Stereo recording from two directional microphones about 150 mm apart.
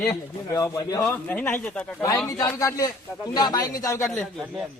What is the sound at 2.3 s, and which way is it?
Speech, 25° left (ahead or behind).